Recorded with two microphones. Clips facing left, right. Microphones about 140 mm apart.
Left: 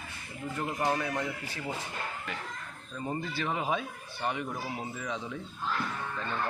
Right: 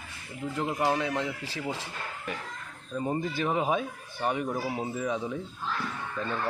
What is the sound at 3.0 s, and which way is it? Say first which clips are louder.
Speech: right 5 dB; 20° right (ahead or behind).